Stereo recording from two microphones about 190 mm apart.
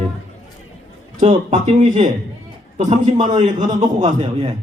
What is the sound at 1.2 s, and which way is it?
A man's voice, 35° right (ahead or behind).